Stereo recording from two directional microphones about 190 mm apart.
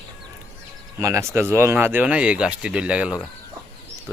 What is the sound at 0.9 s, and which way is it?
Speech, 15° right (ahead or behind).